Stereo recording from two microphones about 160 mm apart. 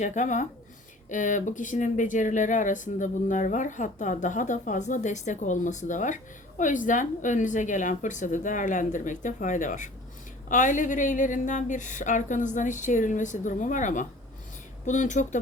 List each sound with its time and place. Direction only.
0.0 s speech: 50° left (ahead or behind)